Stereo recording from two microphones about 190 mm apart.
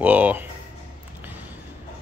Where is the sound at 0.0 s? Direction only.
10° right (ahead or behind).